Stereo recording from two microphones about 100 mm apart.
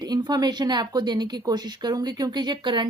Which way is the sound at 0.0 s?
40° right (ahead or behind).